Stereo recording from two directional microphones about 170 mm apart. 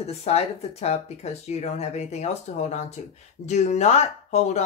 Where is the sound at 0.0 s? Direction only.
40° left (ahead or behind).